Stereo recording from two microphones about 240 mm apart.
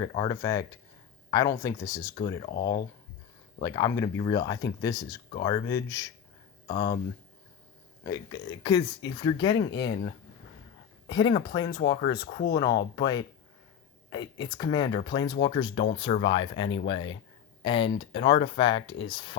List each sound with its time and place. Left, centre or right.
0.1 s speech: centre
3.6 s speech: centre
8.0 s speech: centre
9.7 s speech: left
11.1 s speech: centre